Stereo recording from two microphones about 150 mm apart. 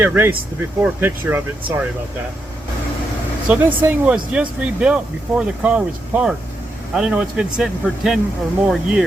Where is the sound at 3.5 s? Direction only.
10° right (ahead or behind).